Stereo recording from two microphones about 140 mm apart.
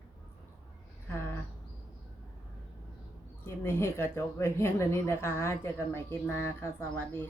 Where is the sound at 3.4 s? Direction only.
20° left (ahead or behind).